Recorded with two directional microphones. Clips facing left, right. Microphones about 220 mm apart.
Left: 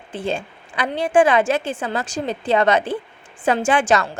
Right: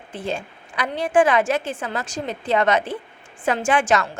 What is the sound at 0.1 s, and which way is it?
A woman's voice, 30° left (ahead or behind).